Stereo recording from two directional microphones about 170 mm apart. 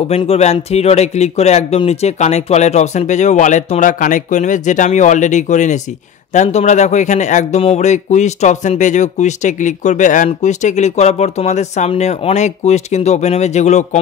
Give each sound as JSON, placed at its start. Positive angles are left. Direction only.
{"t": 0.1, "sound": "a man's voice", "side_deg": 40}